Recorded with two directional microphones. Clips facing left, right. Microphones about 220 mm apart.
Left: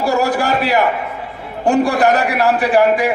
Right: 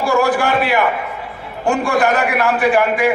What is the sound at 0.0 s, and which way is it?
A man's voice, 40° left (ahead or behind).